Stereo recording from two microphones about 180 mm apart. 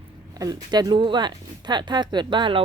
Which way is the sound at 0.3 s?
20° right (ahead or behind).